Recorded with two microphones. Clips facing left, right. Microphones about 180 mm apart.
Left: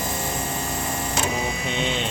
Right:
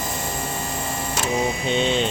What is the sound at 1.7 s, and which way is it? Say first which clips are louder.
Speech: right 6 dB; 30° right (ahead or behind).